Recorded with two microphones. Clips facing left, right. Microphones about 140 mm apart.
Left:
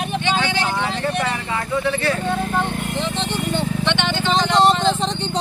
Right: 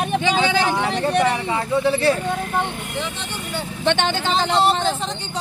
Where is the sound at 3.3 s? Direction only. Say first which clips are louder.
Left 6 dB; 10° right (ahead or behind).